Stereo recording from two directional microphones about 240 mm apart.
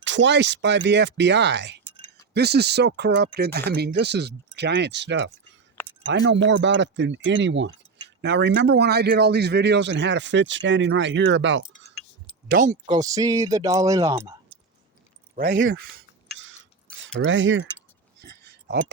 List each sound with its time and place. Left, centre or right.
0.0 s speech: right
12.5 s speech: right
12.9 s speech: centre
15.4 s speech: right
17.2 s speech: right